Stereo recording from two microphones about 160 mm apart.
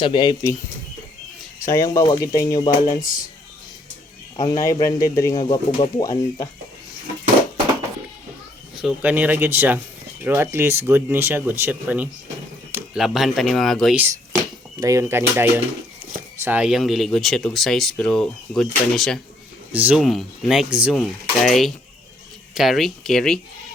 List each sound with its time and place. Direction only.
0.0 s speech: 30° left (ahead or behind)
1.6 s speech: 20° left (ahead or behind)
2.8 s speech: 60° left (ahead or behind)
4.4 s speech: 20° left (ahead or behind)
8.8 s speech: 10° right (ahead or behind)
14.8 s speech: 20° right (ahead or behind); by 19.2 s centre (ahead or behind)
19.7 s speech: 10° right (ahead or behind)